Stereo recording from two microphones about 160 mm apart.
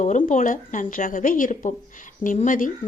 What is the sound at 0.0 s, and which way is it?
A woman's voice, 50° left (ahead or behind).